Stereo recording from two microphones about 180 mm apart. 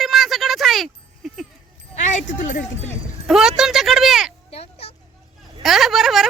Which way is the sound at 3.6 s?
Centre (ahead or behind).